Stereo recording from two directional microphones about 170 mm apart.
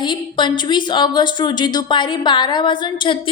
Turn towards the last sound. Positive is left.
turn(degrees=30)  # may be behind; listen again after turning